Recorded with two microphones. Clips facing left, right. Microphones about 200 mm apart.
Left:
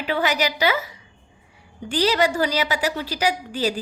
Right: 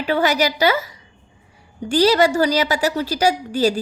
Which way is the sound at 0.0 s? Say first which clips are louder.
Right 4 dB; 40° right (ahead or behind).